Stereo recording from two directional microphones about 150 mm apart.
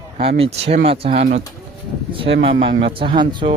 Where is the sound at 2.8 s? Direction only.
35° right (ahead or behind).